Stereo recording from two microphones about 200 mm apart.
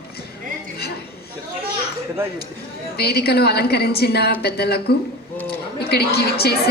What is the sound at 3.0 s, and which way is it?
A woman's voice, 55° left (ahead or behind).